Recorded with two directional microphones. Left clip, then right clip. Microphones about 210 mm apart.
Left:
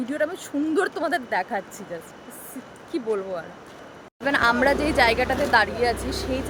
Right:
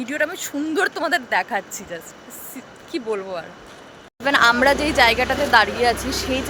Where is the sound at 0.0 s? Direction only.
15° left (ahead or behind).